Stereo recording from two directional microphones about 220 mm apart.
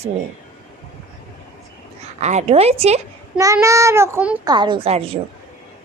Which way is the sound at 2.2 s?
30° right (ahead or behind).